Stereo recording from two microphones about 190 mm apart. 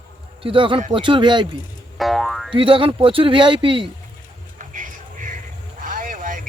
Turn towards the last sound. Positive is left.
turn(degrees=-45)  # may be behind; listen again after turning